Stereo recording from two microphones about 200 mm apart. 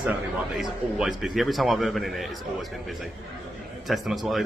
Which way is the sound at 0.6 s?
Centre (ahead or behind).